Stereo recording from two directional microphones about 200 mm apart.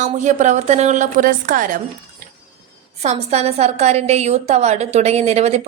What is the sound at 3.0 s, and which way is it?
A woman's voice, 35° right (ahead or behind).